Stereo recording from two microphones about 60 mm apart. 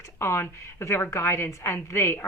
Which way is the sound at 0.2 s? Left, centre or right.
Left.